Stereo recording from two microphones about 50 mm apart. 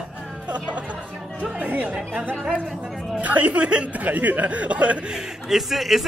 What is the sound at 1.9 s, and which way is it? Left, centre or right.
Speech, right.